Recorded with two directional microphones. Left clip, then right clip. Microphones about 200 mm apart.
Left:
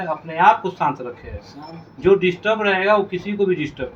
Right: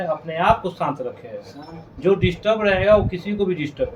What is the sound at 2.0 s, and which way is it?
Speech, 15° right (ahead or behind).